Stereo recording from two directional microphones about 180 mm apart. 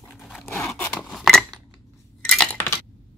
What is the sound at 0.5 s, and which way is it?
Filing, 15° left (ahead or behind).